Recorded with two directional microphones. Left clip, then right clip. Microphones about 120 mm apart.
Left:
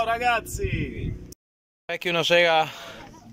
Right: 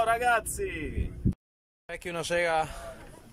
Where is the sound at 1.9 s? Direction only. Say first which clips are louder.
Left 10 dB; 5° left (ahead or behind).